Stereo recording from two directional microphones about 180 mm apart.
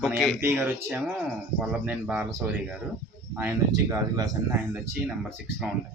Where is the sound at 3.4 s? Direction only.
15° right (ahead or behind).